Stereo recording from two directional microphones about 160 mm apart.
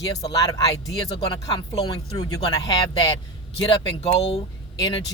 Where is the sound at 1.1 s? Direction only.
35° left (ahead or behind).